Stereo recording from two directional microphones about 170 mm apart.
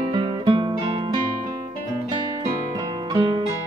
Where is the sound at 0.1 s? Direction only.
30° right (ahead or behind).